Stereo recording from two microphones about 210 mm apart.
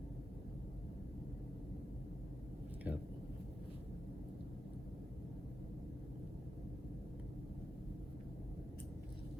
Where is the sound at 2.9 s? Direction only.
5° right (ahead or behind).